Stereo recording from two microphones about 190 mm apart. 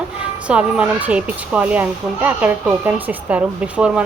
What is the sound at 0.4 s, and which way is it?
Speech, 5° right (ahead or behind).